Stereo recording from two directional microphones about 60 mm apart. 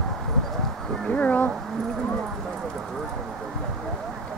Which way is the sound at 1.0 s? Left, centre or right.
Left.